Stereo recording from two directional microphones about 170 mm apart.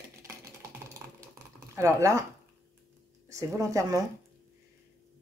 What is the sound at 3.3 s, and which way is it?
Speech, 20° right (ahead or behind).